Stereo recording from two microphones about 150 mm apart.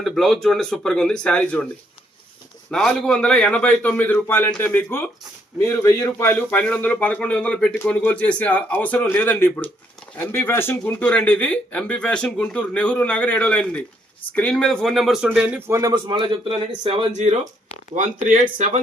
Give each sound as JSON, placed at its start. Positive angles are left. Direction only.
{"t": 0.0, "sound": "speech", "side_deg": 0}
{"t": 2.6, "sound": "speech", "side_deg": 5}
{"t": 16.0, "sound": "a man's voice", "side_deg": -35}
{"t": 17.1, "sound": "speech", "side_deg": -50}
{"t": 17.9, "sound": "speech", "side_deg": -60}